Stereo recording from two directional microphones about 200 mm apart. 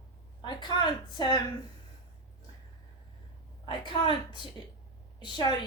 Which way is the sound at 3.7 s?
25° left (ahead or behind).